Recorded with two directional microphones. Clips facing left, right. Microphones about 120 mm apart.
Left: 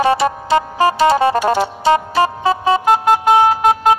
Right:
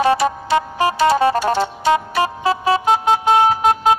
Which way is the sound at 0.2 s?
25° left (ahead or behind).